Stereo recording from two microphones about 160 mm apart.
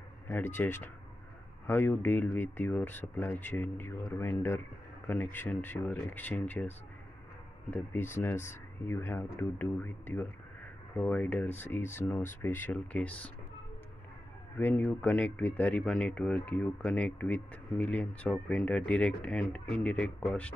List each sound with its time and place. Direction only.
0.3 s speech: 15° left (ahead or behind)
7.7 s speech: 15° left (ahead or behind)
14.6 s speech: 10° left (ahead or behind)